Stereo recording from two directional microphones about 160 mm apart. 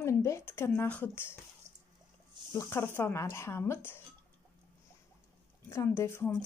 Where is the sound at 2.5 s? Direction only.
15° left (ahead or behind).